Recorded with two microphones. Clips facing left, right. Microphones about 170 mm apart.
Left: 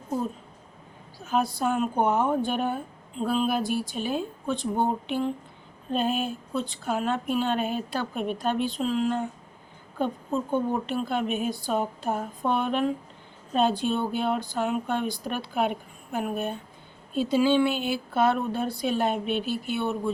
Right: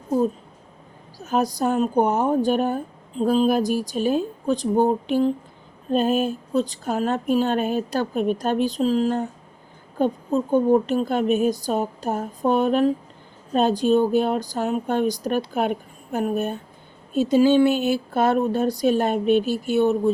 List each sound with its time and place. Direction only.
1.2 s a woman's voice: 40° right (ahead or behind)
10.5 s a woman's voice: 40° right (ahead or behind)